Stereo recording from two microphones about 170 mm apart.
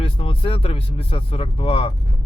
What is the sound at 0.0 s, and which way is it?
Speech, 35° left (ahead or behind).